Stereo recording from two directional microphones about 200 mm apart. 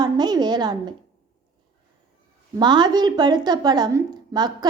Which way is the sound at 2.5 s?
20° right (ahead or behind).